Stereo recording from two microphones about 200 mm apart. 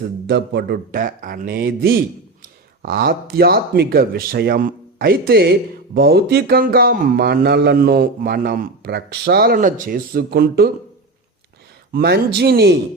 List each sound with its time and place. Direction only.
0.3 s speech: 55° right (ahead or behind)
11.9 s speech: 50° right (ahead or behind)